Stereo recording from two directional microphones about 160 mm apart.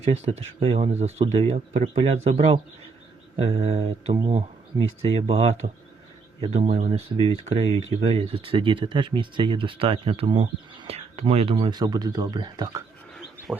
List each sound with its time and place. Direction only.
0.0 s speech: 40° right (ahead or behind)
5.6 s speech: 65° right (ahead or behind)
6.4 s speech: 40° right (ahead or behind); by 12.8 s 25° right (ahead or behind)
13.5 s a sound: 5° right (ahead or behind)